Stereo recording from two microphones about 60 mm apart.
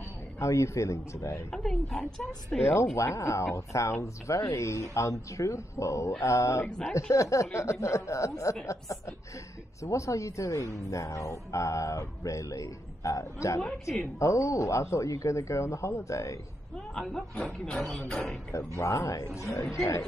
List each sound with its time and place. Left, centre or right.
0.4 s speech: left
1.5 s a woman's voice: centre
2.6 s speech: left
16.9 s a woman's voice: centre
18.8 s speech: left